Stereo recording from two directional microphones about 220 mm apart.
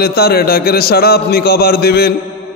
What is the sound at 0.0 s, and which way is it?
Music, 45° left (ahead or behind).